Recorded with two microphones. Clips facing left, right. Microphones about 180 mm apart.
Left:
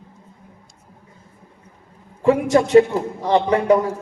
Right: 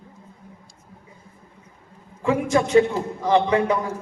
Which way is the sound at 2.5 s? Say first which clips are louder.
Left 3 dB; 40° left (ahead or behind).